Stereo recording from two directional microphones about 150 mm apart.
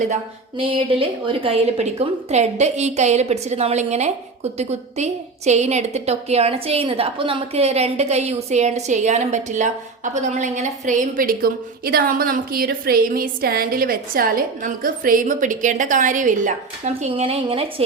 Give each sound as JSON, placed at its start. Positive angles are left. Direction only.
{"t": 0.5, "sound": "a woman's voice", "side_deg": -35}
{"t": 17.1, "sound": "a woman's voice", "side_deg": -40}